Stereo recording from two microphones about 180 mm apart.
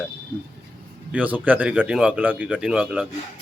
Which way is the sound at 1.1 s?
10° right (ahead or behind).